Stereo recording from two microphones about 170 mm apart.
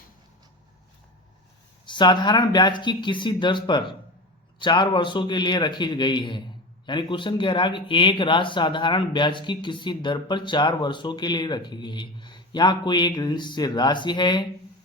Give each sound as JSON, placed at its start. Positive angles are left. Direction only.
{"t": 1.9, "sound": "speech", "side_deg": 25}